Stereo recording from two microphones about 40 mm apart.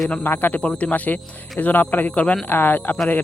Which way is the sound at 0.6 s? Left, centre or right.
Left.